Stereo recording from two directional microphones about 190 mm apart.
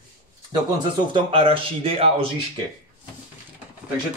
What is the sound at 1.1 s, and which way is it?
Speech, 30° right (ahead or behind).